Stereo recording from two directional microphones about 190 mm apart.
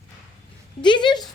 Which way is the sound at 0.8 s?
25° left (ahead or behind).